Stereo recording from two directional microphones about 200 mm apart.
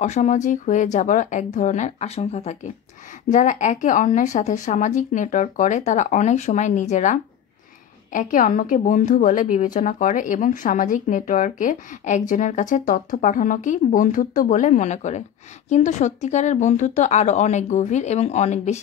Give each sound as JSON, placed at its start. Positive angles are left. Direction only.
{"t": 0.0, "sound": "speech", "side_deg": 35}